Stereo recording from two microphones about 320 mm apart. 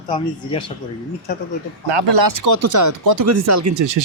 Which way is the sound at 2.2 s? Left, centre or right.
Right.